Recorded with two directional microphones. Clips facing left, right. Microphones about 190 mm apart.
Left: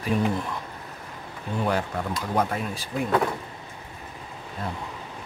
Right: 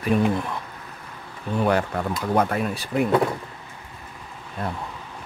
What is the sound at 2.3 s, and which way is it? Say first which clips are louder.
Speech: right 4 dB; 65° right (ahead or behind).